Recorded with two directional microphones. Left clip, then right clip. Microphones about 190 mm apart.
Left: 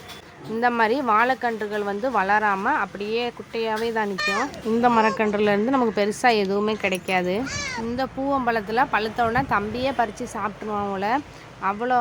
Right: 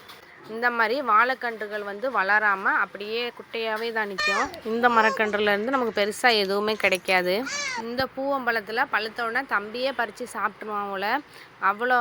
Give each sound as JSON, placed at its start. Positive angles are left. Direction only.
{"t": 0.6, "sound": "speech", "side_deg": -10}
{"t": 4.2, "sound": "a child's voice", "side_deg": 0}
{"t": 4.8, "sound": "a woman's voice", "side_deg": -20}
{"t": 7.4, "sound": "a child's voice", "side_deg": 0}
{"t": 7.9, "sound": "speech", "side_deg": -15}
{"t": 10.3, "sound": "a woman's voice", "side_deg": -25}